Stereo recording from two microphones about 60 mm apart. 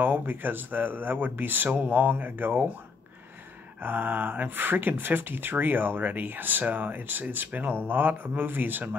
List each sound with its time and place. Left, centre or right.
0.0 s speech: right
3.8 s speech: right